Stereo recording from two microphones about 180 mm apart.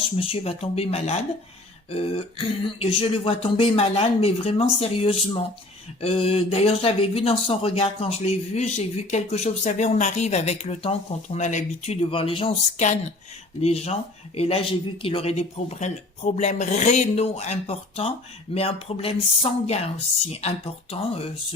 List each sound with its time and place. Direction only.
0.2 s speech: 30° left (ahead or behind)